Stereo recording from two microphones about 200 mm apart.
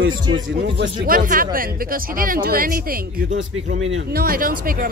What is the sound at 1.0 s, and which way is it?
Speech, 45° right (ahead or behind).